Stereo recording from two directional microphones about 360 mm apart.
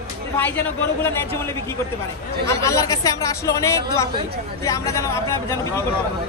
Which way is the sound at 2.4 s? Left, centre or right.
Centre.